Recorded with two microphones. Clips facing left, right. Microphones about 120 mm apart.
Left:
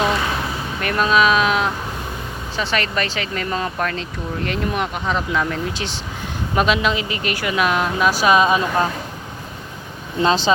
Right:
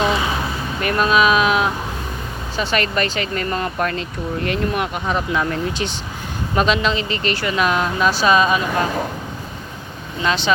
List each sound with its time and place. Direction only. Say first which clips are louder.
0.8 s speech: right 1 dB; 5° right (ahead or behind); by 8.6 s 20° left (ahead or behind)
10.2 s speech: left 3 dB; 40° left (ahead or behind)